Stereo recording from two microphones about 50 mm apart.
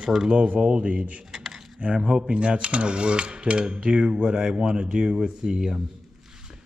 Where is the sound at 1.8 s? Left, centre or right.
Centre.